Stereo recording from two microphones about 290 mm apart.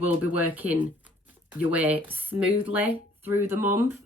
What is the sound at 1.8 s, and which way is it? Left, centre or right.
Speech, centre.